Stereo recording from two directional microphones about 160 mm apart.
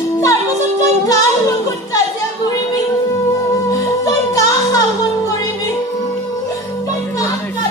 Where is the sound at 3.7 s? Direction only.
20° left (ahead or behind).